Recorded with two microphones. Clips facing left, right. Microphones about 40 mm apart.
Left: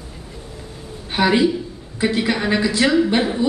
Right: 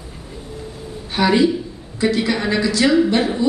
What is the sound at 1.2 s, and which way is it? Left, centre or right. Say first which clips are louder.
Speech: right 1 dB; centre.